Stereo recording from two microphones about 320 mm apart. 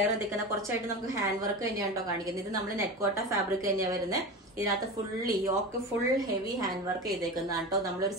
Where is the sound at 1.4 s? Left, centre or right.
Centre.